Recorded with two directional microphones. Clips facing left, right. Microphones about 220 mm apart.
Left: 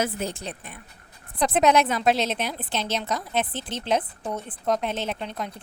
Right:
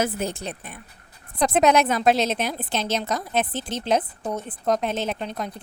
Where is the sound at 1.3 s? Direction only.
40° right (ahead or behind).